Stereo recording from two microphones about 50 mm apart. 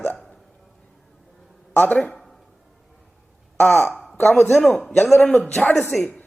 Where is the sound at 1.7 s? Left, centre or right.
Left.